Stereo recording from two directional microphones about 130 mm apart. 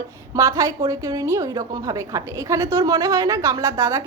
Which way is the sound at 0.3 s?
25° right (ahead or behind).